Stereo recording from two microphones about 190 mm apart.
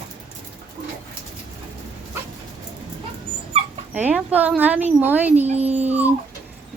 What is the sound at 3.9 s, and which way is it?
A woman's voice, 10° right (ahead or behind).